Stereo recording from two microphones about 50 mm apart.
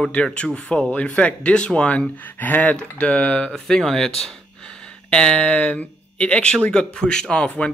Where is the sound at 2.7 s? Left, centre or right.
Left.